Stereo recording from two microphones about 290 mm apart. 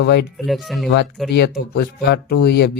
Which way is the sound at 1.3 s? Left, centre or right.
Left.